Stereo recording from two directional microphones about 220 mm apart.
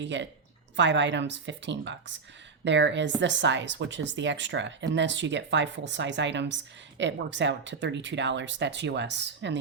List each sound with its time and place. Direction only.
0.0 s speech: 55° right (ahead or behind)